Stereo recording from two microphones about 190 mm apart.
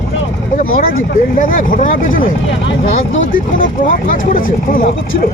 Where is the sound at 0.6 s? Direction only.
50° left (ahead or behind).